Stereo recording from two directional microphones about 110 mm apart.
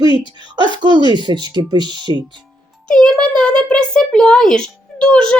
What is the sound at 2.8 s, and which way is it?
A child's voice, 10° left (ahead or behind).